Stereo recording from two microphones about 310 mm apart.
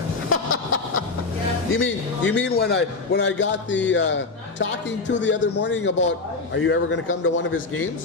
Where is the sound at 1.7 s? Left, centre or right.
Left.